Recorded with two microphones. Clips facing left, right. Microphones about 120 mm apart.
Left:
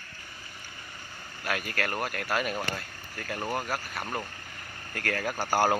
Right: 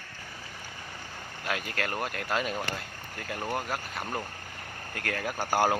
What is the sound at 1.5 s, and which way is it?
Speech, 20° right (ahead or behind).